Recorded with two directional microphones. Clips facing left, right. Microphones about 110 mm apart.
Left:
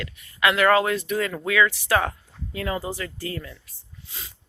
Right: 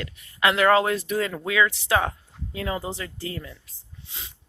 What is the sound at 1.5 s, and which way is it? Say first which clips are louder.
Speech: left 2 dB; 20° right (ahead or behind).